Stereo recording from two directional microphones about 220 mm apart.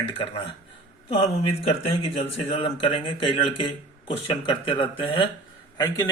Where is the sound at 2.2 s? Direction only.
25° left (ahead or behind).